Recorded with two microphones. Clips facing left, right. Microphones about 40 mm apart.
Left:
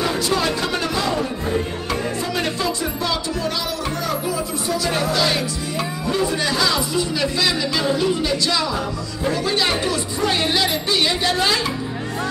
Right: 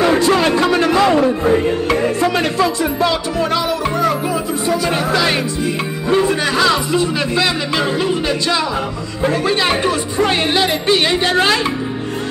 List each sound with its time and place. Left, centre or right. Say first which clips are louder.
0.0 s a sound: right 7 dB; right
0.9 s music: right 9 dB; right
2.2 s music: right 7 dB; right
2.8 s speech: right 7 dB; right
4.6 s music: right 4 dB; right
6.0 s speech: right 7 dB; right